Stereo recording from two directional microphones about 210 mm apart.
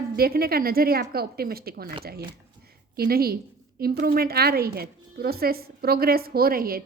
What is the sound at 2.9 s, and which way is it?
A woman's voice, 45° right (ahead or behind).